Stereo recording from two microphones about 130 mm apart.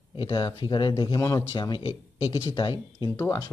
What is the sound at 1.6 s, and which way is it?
Speech, 40° left (ahead or behind).